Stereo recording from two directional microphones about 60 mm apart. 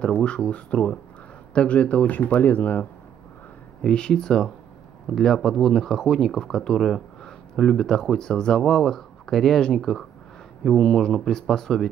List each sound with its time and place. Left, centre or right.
0.0 s speech: centre
3.8 s speech: centre